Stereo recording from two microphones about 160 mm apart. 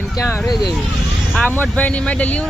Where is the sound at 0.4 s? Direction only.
Centre (ahead or behind).